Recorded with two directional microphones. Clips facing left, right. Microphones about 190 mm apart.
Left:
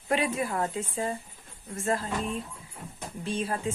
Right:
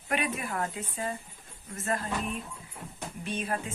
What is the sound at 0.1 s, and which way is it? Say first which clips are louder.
Speech: left 4 dB; 30° left (ahead or behind).